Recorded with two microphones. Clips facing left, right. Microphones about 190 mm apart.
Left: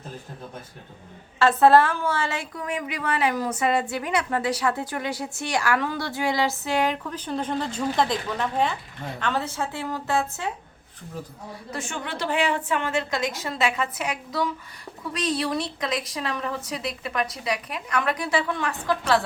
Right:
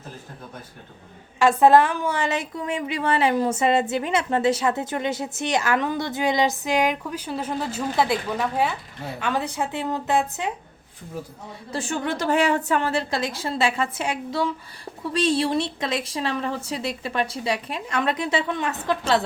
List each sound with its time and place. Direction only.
1.4 s a woman's voice: 15° right (ahead or behind)
11.7 s a woman's voice: 35° right (ahead or behind)